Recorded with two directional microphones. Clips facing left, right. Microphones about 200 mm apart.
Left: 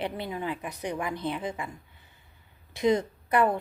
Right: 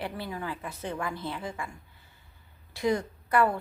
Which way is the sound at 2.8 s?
20° left (ahead or behind).